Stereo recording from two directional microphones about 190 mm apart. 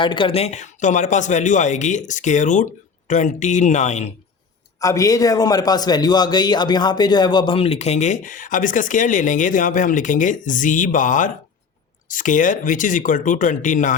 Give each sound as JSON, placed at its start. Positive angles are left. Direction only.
{"t": 0.0, "sound": "a man's voice", "side_deg": 25}
{"t": 4.8, "sound": "a man's voice", "side_deg": 15}